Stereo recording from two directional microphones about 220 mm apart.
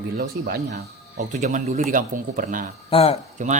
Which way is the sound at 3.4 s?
35° right (ahead or behind).